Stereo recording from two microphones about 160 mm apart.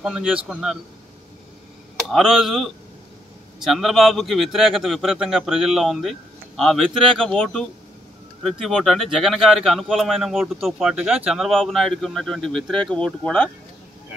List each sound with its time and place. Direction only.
0.0 s a man's voice: 5° right (ahead or behind)
2.0 s a man's voice: centre (ahead or behind)